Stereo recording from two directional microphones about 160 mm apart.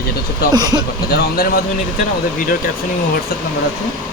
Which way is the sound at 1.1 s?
70° left (ahead or behind).